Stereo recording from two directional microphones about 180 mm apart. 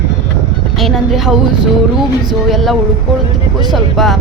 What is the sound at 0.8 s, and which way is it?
Speech, centre (ahead or behind).